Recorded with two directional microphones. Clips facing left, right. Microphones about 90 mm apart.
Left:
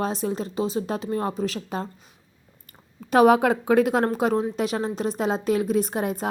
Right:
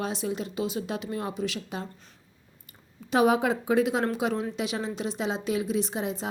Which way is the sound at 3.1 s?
55° left (ahead or behind).